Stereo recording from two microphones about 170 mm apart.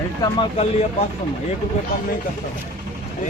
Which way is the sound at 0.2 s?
30° left (ahead or behind).